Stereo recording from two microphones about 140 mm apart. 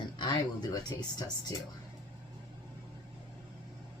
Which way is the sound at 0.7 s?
30° left (ahead or behind).